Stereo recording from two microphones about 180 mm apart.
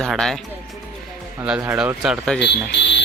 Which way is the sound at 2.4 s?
70° left (ahead or behind).